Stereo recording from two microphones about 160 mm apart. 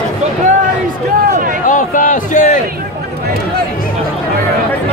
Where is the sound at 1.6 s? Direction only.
55° left (ahead or behind).